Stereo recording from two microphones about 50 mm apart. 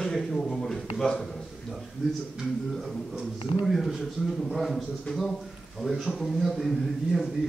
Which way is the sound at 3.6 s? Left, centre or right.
Centre.